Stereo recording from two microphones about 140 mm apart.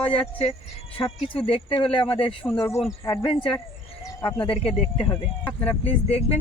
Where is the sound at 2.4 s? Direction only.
20° left (ahead or behind).